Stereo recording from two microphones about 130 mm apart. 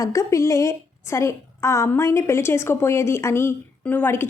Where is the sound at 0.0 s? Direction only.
25° left (ahead or behind).